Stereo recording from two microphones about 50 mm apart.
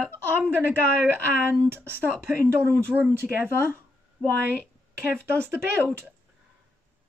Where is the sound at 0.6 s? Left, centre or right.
Right.